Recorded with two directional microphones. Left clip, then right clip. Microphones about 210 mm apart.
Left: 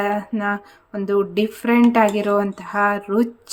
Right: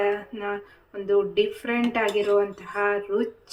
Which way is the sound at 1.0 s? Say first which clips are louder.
Left 2 dB; 60° left (ahead or behind).